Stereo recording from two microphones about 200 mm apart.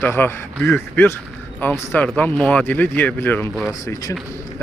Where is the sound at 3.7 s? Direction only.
15° left (ahead or behind).